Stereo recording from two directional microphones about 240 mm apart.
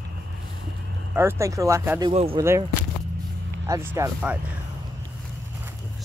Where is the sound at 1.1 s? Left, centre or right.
Centre.